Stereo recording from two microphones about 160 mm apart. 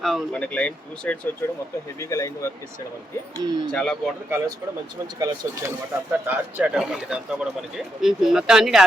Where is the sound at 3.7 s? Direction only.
5° left (ahead or behind).